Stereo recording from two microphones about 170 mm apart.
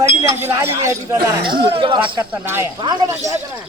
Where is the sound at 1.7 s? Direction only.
30° right (ahead or behind).